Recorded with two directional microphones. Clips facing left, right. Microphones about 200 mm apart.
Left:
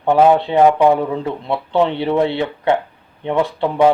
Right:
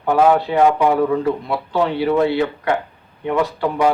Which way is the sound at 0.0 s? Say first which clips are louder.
Left 2 dB; 25° left (ahead or behind).